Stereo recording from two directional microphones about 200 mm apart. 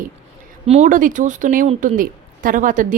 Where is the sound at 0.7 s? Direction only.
40° right (ahead or behind).